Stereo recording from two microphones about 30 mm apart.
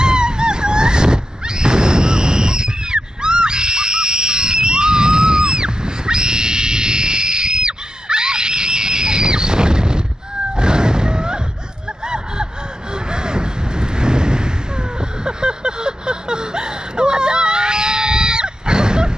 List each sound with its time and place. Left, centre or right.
0.0 s a sound: right
10.5 s vehicle: right
12.0 s gasp: right
12.9 s vehicle: right